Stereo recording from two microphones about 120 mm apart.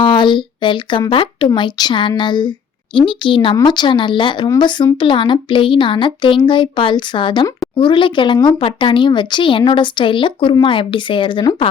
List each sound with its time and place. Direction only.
0.0 s speech: 40° left (ahead or behind)